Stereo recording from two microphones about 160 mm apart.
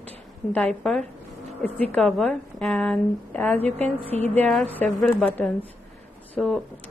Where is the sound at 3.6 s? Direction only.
45° right (ahead or behind).